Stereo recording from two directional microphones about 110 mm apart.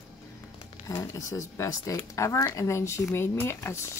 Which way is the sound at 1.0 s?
30° left (ahead or behind).